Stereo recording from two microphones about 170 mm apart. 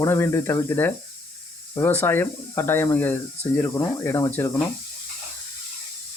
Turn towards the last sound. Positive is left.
turn(degrees=15)  # may be behind; listen again after turning